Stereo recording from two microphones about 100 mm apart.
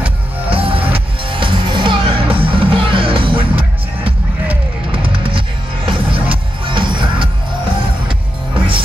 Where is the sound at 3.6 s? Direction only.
15° right (ahead or behind).